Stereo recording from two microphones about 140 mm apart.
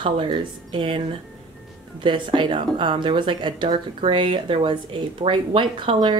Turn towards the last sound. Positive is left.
turn(degrees=-35)  # may be behind; listen again after turning